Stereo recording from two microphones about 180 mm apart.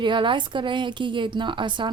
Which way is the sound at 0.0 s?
25° right (ahead or behind).